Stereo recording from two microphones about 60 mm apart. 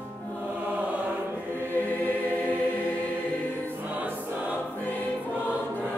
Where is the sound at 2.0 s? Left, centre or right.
Left.